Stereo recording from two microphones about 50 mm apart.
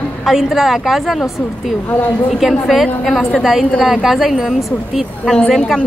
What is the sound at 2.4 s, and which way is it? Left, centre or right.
A woman's voice, centre.